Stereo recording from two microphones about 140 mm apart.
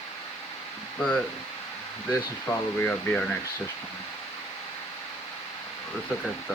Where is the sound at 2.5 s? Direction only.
10° left (ahead or behind).